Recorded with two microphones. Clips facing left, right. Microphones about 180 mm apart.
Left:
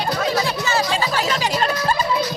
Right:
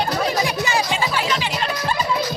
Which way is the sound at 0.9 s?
40° left (ahead or behind).